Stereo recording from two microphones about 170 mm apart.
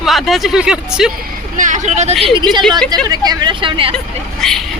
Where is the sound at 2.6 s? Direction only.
Centre (ahead or behind).